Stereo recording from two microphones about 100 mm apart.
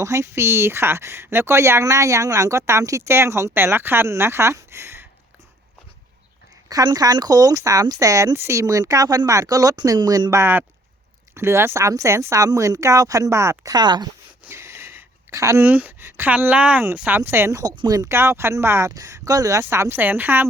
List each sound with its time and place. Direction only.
0.0 s speech: 30° right (ahead or behind)
6.7 s speech: 40° right (ahead or behind)
10.4 s speech: 20° right (ahead or behind)
13.7 s speech: 45° right (ahead or behind)
14.4 s a sound: 25° right (ahead or behind)
16.4 s speech: 15° right (ahead or behind)
17.6 s speech: 40° right (ahead or behind)
18.1 s speech: 25° right (ahead or behind)